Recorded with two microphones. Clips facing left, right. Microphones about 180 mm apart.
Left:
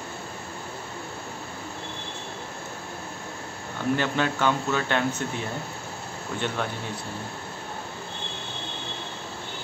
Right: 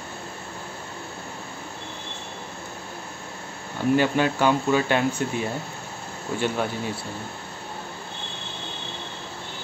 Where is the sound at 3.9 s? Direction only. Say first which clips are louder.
Right 6 dB; 10° right (ahead or behind).